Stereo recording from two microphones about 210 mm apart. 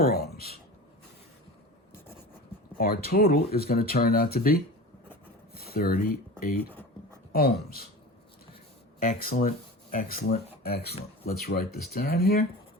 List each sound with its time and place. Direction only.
0.0 s speech: 45° left (ahead or behind)
2.7 s speech: 45° left (ahead or behind)
5.5 s a sound: 45° left (ahead or behind)
7.3 s speech: 45° left (ahead or behind)
9.0 s speech: 45° left (ahead or behind)